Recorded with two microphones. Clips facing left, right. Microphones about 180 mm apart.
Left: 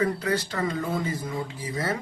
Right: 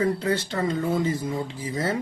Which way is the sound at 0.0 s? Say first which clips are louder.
Right 2 dB; 25° right (ahead or behind).